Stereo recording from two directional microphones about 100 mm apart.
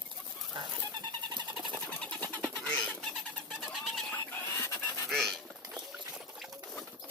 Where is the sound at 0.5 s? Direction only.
50° right (ahead or behind).